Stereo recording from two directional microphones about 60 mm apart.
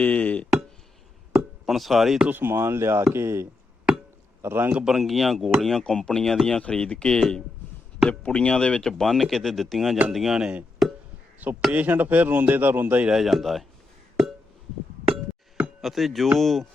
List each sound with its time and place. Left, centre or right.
0.0 s a sound: left
1.3 s a sound: centre
2.3 s speech: right
4.4 s a man's voice: right
4.7 s speech: centre
10.8 s a sound: centre
11.7 s speech: right
13.1 s speech: centre
15.8 s speech: centre